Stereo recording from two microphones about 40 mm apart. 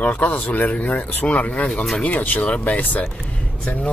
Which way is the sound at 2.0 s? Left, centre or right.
Left.